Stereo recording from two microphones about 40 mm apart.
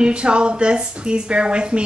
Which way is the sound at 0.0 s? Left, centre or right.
Right.